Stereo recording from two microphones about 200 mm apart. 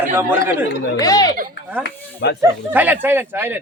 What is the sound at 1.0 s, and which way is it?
Speech, 20° left (ahead or behind).